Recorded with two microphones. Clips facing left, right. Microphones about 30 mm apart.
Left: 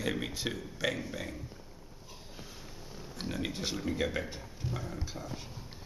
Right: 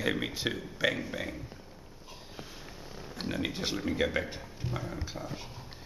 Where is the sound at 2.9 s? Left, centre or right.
Centre.